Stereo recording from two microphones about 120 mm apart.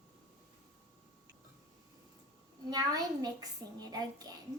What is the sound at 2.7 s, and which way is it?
A child's voice, 30° right (ahead or behind).